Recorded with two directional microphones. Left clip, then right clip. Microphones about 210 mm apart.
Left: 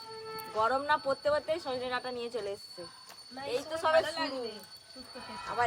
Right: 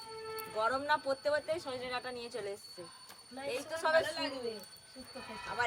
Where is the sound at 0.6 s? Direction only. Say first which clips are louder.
Left 4 dB; 35° left (ahead or behind).